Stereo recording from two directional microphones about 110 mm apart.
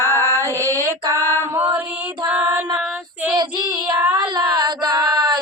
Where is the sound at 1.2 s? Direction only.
20° left (ahead or behind).